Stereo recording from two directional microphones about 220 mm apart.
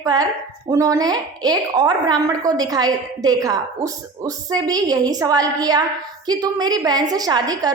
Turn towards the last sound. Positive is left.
turn(degrees=-15)  # may be behind; listen again after turning